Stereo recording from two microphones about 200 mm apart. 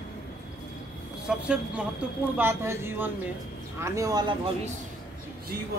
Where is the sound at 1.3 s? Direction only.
5° right (ahead or behind); by 4.3 s 20° right (ahead or behind).